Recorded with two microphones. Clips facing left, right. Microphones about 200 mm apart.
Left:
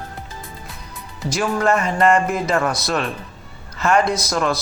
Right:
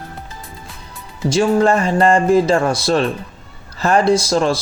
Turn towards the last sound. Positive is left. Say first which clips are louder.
# right 6 dB
turn(degrees=-30)  # may be behind; listen again after turning